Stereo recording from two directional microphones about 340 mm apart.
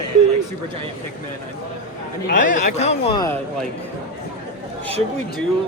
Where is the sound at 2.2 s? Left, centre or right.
Left.